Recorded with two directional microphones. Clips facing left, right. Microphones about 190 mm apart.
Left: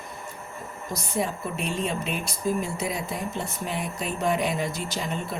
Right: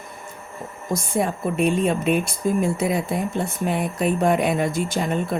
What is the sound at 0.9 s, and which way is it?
Speech, 50° right (ahead or behind).